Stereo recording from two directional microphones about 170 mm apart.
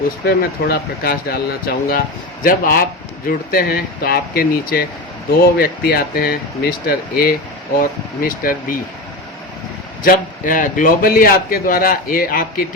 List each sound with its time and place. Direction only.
0.3 s a man's voice: 65° left (ahead or behind)
10.0 s a man's voice: 55° left (ahead or behind)